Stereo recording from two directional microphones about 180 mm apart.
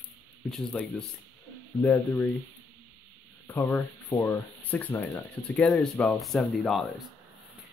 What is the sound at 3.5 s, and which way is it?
Speech, 10° left (ahead or behind).